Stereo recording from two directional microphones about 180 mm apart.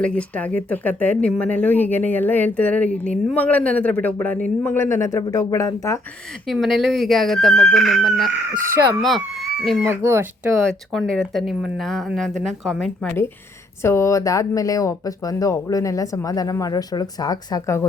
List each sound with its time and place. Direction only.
0.0 s speech: 5° left (ahead or behind)
6.5 s speech: centre (ahead or behind)
9.8 s speech: 15° right (ahead or behind)
10.9 s speech: 5° left (ahead or behind)
13.8 s speech: 15° left (ahead or behind)